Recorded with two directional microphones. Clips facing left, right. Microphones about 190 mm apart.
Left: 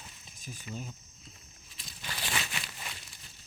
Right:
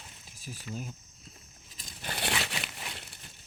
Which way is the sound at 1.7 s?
50° right (ahead or behind).